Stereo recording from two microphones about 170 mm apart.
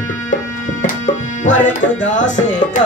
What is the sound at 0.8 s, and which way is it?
Music, 50° left (ahead or behind).